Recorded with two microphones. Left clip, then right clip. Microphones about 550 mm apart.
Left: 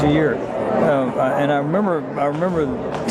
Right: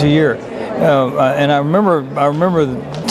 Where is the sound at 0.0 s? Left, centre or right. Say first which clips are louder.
Right 4 dB; right.